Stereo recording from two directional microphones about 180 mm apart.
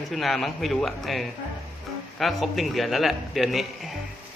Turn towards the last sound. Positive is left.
turn(degrees=0)  # may be behind; listen again after turning